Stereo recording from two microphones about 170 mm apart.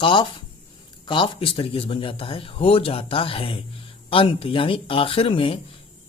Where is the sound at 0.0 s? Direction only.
30° left (ahead or behind).